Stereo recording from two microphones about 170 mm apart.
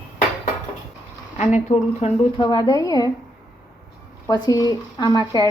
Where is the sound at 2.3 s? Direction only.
25° left (ahead or behind).